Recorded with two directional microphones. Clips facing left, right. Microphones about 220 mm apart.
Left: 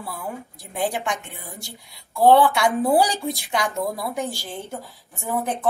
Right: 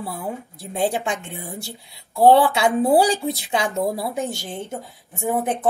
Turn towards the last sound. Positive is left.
turn(degrees=-20)  # may be behind; listen again after turning